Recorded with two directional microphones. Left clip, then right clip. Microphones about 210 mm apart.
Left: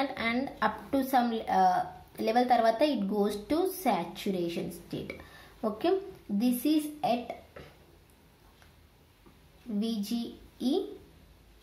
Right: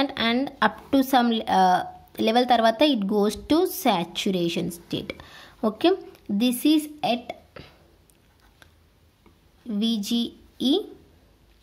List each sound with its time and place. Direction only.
0.0 s a woman's voice: 40° right (ahead or behind)
9.7 s a woman's voice: 45° right (ahead or behind)